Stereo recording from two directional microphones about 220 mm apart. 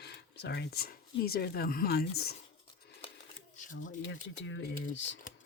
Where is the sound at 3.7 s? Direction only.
35° left (ahead or behind).